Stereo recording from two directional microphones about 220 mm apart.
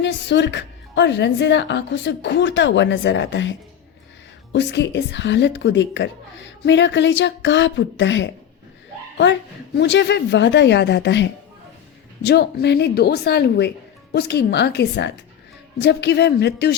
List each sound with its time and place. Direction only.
0.0 s a woman's voice: 55° left (ahead or behind)
4.5 s a woman's voice: 50° left (ahead or behind)